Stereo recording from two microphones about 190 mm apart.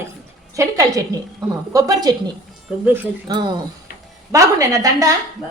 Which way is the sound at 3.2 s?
25° right (ahead or behind).